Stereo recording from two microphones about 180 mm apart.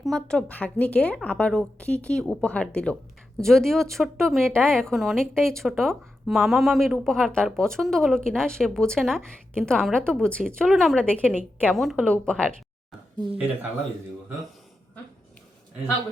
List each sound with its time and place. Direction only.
0.0 s a woman's voice: 5° left (ahead or behind)
13.1 s speech: 25° right (ahead or behind)